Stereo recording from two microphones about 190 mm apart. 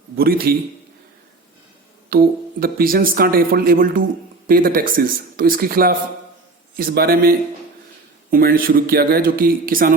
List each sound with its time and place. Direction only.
0.2 s speech: 50° right (ahead or behind)
2.0 s speech: 50° right (ahead or behind)